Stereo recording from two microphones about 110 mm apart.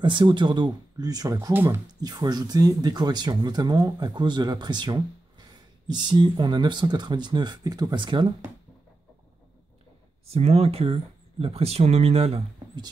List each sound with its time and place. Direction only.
0.0 s speech: 45° right (ahead or behind)
1.5 s speech: 20° right (ahead or behind)
2.0 s speech: 35° right (ahead or behind)
10.2 s speech: 65° right (ahead or behind)